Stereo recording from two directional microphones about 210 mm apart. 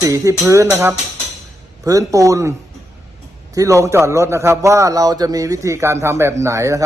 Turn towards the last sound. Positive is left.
turn(degrees=-15)  # may be behind; listen again after turning